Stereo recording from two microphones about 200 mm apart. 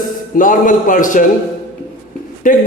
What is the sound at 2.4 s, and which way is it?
Speech, 45° left (ahead or behind).